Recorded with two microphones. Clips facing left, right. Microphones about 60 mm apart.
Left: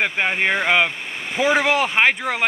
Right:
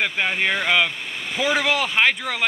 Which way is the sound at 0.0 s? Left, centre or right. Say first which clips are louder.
Left 2 dB; centre.